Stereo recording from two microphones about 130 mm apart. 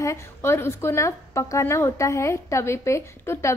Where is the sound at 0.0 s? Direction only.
20° left (ahead or behind).